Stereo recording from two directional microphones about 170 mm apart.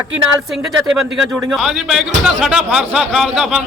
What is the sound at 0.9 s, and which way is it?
A man's voice, 5° right (ahead or behind).